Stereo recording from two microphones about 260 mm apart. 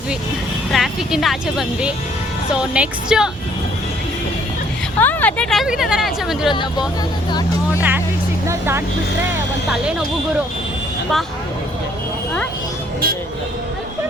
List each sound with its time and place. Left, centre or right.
0.7 s speech: centre
4.9 s speech: centre
6.5 s speech: centre
7.8 s music: centre
8.4 s vehicle: centre
9.6 s speech: centre